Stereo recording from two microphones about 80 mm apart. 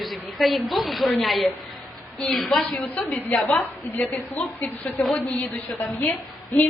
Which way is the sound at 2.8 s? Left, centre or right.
Left.